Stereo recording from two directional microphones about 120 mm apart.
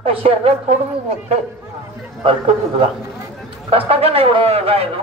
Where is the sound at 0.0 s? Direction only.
50° right (ahead or behind).